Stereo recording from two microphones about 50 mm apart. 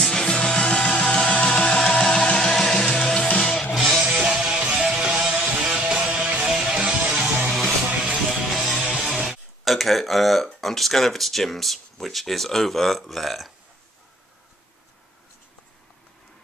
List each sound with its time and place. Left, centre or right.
0.0 s music: centre
3.3 s music: centre
3.7 s music: centre
4.0 s music: centre
6.4 s music: centre
8.0 s music: centre
8.6 s music: centre
9.7 s speech: centre